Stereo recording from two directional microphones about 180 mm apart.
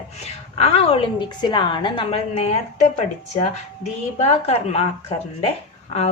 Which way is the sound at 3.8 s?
35° left (ahead or behind).